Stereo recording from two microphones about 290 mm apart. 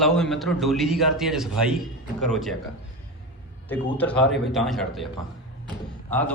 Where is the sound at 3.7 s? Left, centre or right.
Centre.